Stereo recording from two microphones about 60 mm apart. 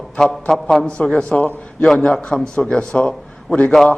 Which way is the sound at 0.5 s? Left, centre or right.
Centre.